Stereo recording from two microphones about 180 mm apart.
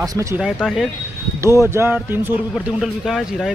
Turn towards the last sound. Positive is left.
turn(degrees=0)  # may be behind; listen again after turning